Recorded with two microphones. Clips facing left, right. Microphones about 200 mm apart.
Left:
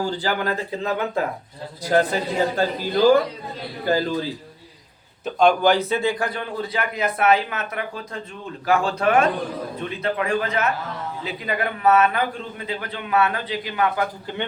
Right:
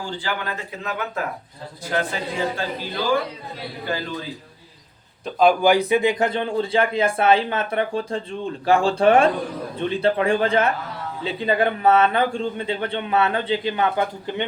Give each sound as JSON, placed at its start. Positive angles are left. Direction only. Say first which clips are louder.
{"t": 0.0, "sound": "a man's voice", "louder": "left 5 dB", "side_deg": 40}
{"t": 5.2, "sound": "a man's voice", "louder": "right 1 dB", "side_deg": -5}